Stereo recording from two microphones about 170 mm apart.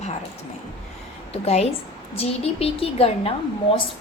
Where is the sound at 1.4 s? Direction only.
35° left (ahead or behind).